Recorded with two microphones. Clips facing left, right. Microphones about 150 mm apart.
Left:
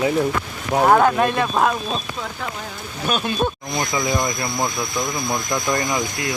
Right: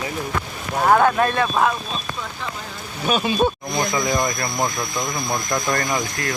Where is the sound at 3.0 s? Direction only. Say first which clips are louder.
Right 2 dB; 5° right (ahead or behind).